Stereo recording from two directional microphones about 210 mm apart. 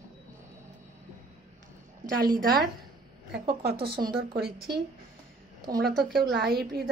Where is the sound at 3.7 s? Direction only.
50° right (ahead or behind).